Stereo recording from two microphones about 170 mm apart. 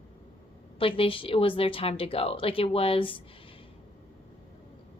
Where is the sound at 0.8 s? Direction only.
30° left (ahead or behind).